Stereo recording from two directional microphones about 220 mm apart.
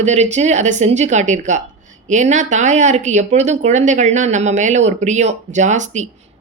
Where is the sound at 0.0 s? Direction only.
30° right (ahead or behind).